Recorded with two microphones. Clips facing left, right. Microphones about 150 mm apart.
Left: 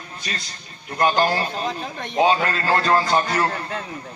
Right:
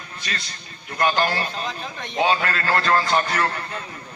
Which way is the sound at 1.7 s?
50° left (ahead or behind).